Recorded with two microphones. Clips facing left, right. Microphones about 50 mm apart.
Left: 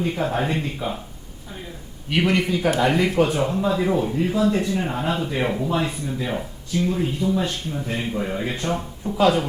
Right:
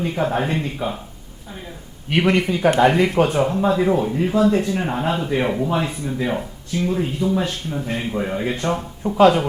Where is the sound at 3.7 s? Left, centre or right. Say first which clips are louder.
Right 3 dB; centre.